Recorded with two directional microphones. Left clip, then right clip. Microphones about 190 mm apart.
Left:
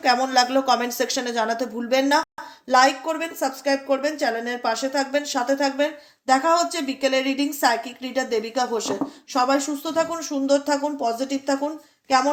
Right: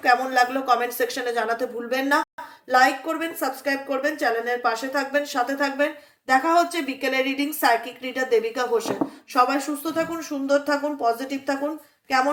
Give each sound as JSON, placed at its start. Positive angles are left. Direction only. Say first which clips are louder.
{"t": 0.0, "sound": "speech", "louder": "even", "side_deg": 40}